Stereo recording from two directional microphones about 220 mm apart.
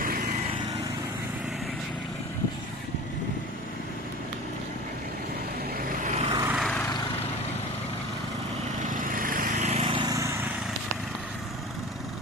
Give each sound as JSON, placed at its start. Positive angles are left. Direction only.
{"t": 0.0, "sound": "vehicle", "side_deg": -40}
{"t": 5.7, "sound": "vehicle", "side_deg": -35}
{"t": 6.3, "sound": "vehicle", "side_deg": -10}
{"t": 8.8, "sound": "vehicle", "side_deg": -35}